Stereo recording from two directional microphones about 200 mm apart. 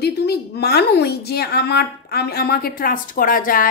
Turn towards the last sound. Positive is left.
turn(degrees=45)  # may be behind; listen again after turning